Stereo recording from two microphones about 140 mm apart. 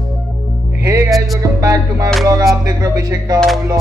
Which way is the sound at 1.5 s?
25° right (ahead or behind).